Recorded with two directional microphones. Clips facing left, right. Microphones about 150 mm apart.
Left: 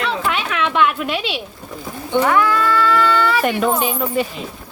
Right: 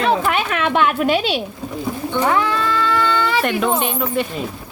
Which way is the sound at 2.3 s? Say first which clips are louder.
Left 1 dB; 25° right (ahead or behind).